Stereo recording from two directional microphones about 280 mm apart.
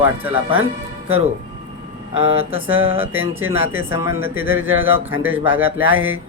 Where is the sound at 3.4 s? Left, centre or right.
Centre.